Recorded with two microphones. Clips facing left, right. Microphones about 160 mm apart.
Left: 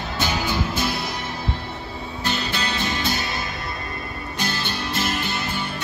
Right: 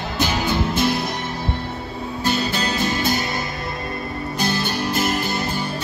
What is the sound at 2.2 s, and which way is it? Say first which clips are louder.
Music: right 4 dB; 40° right (ahead or behind).